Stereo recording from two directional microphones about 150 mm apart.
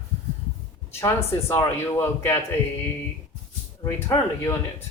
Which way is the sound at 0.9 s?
15° left (ahead or behind).